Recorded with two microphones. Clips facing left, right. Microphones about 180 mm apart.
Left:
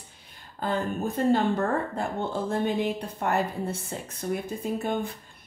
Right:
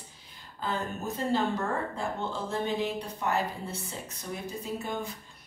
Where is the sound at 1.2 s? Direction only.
55° left (ahead or behind).